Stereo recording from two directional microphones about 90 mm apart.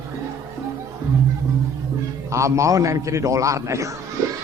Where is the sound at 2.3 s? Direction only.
35° right (ahead or behind).